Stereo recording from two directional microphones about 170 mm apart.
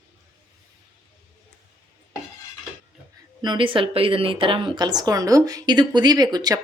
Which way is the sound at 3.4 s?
30° right (ahead or behind).